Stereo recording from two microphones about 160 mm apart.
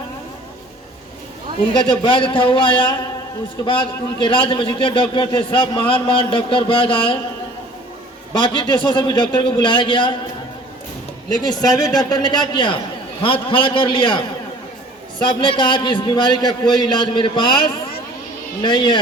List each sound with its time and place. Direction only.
1.7 s a man's voice: 30° left (ahead or behind)
8.3 s a man's voice: 30° left (ahead or behind)
11.3 s a man's voice: 25° left (ahead or behind)
15.3 s a man's voice: 30° left (ahead or behind)